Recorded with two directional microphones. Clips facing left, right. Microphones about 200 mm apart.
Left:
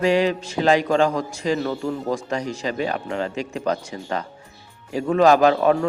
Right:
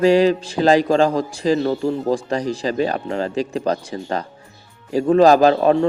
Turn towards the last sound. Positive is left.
turn(degrees=-30)  # may be behind; listen again after turning